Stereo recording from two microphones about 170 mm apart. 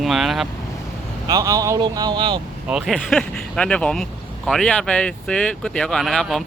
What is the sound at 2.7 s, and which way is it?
Speech, 5° right (ahead or behind).